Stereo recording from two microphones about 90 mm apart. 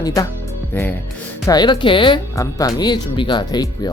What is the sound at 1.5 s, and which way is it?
Speech, 55° left (ahead or behind).